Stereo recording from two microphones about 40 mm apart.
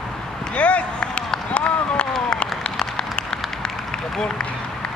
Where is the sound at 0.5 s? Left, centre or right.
Left.